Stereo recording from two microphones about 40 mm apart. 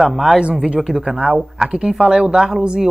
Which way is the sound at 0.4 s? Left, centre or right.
Right.